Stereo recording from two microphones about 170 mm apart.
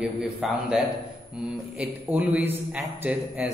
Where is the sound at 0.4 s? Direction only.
5° right (ahead or behind).